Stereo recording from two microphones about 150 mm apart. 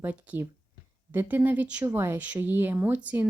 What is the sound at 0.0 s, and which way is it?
Speech, 10° right (ahead or behind).